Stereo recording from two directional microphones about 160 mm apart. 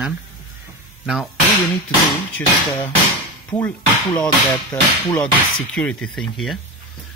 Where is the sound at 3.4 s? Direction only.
10° left (ahead or behind).